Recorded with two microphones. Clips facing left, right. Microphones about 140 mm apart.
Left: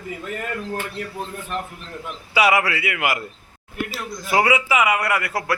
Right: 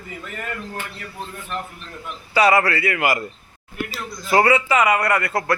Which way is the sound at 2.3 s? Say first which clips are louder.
Right 2 dB; 10° left (ahead or behind).